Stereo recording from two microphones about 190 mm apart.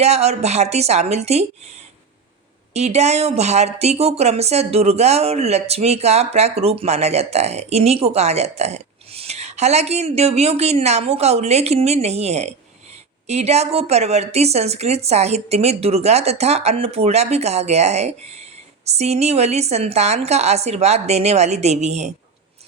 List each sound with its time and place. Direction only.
0.0 s speech: 35° right (ahead or behind)
2.7 s speech: 35° right (ahead or behind)